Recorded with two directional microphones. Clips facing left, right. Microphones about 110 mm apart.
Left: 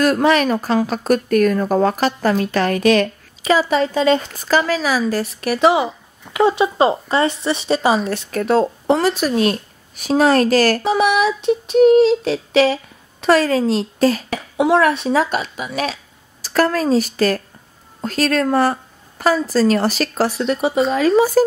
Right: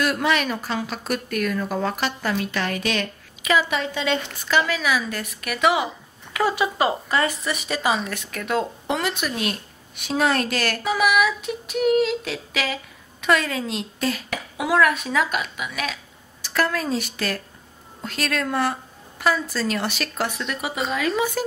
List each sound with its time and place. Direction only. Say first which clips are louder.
0.0 s a woman's voice: left 7 dB; 45° left (ahead or behind)